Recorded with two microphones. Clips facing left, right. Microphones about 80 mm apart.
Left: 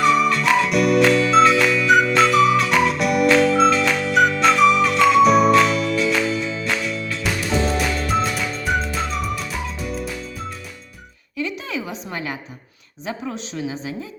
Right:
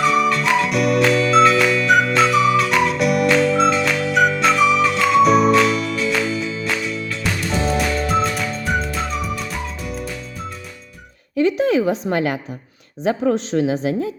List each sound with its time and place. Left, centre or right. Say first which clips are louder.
0.0 s music: even; centre
11.3 s a sound: right 11 dB; right
12.1 s a woman's voice: right 8 dB; right